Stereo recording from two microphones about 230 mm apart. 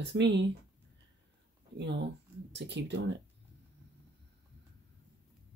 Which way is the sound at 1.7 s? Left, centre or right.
Right.